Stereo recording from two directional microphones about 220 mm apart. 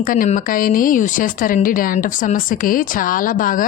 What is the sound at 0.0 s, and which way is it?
Speech, 40° left (ahead or behind).